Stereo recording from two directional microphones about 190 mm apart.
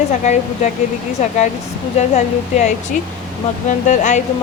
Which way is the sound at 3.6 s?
40° left (ahead or behind).